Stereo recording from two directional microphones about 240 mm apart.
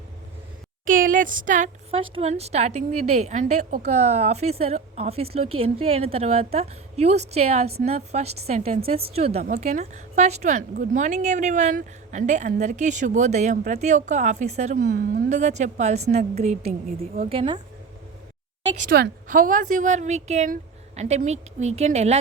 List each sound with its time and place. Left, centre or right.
0.9 s a woman's voice: right
18.8 s a woman's voice: right